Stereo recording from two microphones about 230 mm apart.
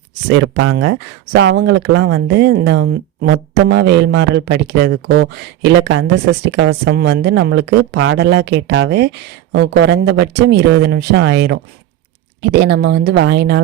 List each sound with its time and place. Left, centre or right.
0.3 s a woman's voice: right
5.8 s a woman's voice: right